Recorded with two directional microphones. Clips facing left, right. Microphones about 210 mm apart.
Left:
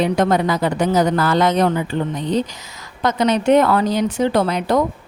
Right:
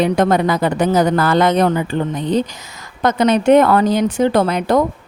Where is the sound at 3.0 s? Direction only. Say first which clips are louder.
Right 3 dB; 55° right (ahead or behind).